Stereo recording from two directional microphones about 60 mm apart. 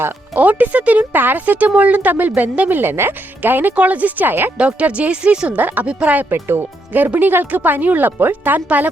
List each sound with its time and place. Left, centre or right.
0.3 s speech: right
4.5 s speech: centre
6.3 s speech: right